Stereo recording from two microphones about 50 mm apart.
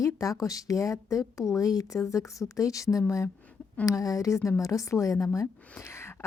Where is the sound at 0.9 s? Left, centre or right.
Left.